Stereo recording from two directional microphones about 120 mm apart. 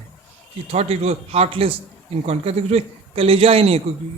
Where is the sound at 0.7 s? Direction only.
65° right (ahead or behind).